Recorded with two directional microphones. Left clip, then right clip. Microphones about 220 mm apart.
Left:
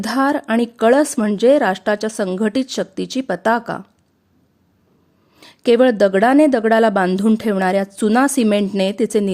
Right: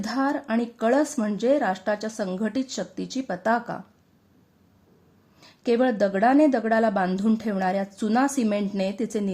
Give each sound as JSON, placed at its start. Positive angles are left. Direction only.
{"t": 0.0, "sound": "a woman's voice", "side_deg": 35}
{"t": 5.4, "sound": "a woman's voice", "side_deg": 35}